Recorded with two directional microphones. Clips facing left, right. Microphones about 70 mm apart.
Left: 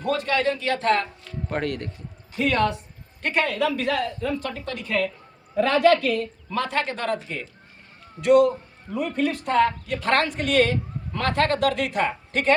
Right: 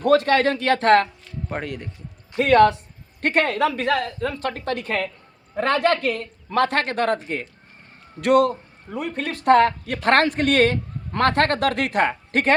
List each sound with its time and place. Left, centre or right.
0.0 s speech: right
1.5 s speech: centre
2.3 s a woman's voice: right